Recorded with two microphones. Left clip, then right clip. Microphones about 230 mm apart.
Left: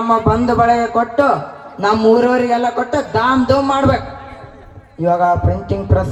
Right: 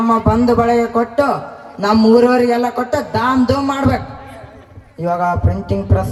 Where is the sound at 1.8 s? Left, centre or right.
Left.